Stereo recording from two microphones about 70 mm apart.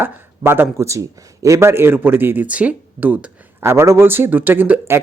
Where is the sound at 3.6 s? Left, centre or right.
Right.